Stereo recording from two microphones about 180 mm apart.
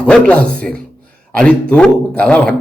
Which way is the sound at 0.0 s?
5° left (ahead or behind).